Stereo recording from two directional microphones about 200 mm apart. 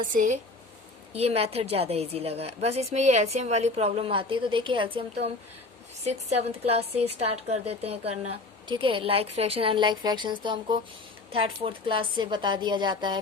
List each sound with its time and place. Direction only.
0.0 s a woman's voice: 40° right (ahead or behind)
6.1 s a woman's voice: 30° right (ahead or behind)